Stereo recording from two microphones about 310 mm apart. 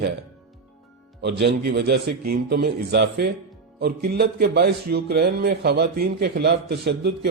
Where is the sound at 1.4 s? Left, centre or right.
Right.